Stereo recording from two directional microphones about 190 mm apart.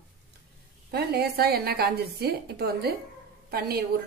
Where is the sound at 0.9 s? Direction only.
55° right (ahead or behind).